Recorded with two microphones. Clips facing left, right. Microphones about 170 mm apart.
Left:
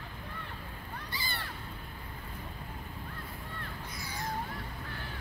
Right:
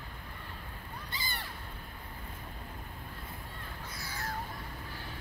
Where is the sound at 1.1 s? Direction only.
20° right (ahead or behind).